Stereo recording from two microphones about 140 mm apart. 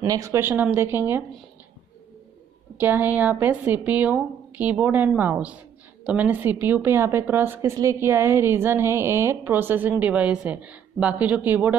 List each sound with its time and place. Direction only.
0.0 s a woman's voice: 20° right (ahead or behind)
2.8 s a woman's voice: 15° right (ahead or behind)